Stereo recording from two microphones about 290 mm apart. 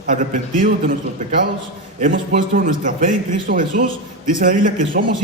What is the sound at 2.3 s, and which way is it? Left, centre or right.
A man's voice, right.